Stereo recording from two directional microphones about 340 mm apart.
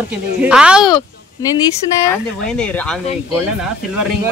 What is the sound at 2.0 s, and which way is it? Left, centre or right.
Speech, centre.